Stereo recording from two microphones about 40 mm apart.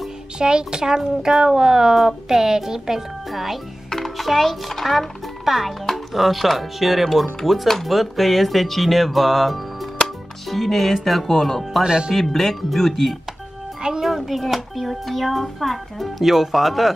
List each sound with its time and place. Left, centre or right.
0.4 s a child's voice: right
3.9 s a child's voice: centre
11.8 s speech: right
12.1 s a child's voice: centre